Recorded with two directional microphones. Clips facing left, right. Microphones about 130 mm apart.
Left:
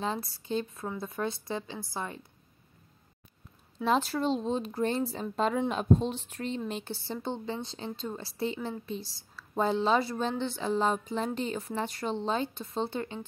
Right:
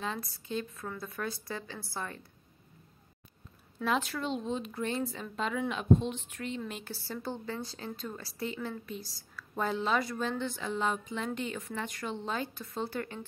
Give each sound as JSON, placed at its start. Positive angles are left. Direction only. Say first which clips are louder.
{"t": 0.0, "sound": "a woman's voice", "louder": "left 4 dB", "side_deg": 30}
{"t": 3.8, "sound": "a woman's voice", "louder": "left 4 dB", "side_deg": 35}